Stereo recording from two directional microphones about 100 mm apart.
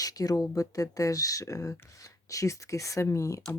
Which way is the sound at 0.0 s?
35° left (ahead or behind).